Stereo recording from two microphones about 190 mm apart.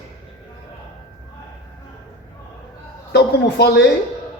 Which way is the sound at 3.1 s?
65° left (ahead or behind).